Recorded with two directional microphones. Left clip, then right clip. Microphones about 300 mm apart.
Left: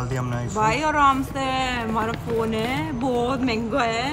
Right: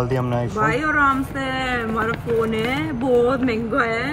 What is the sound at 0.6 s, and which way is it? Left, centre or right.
Speech, left.